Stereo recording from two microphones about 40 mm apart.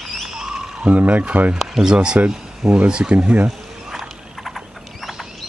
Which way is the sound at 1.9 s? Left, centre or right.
Right.